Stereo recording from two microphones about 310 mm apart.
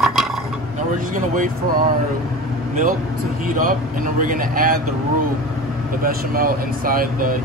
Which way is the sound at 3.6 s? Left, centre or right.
Right.